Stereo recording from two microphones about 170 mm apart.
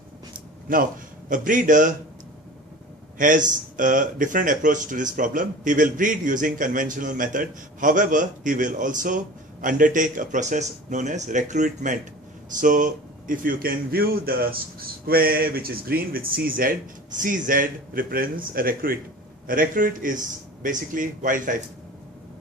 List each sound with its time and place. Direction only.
0.7 s speech: 55° right (ahead or behind)
3.2 s speech: 50° right (ahead or behind)